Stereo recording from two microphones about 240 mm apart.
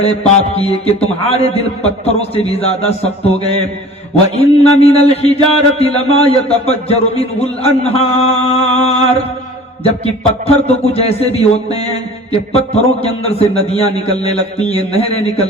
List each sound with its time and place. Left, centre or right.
0.0 s a man's voice: left
4.4 s a man's voice: left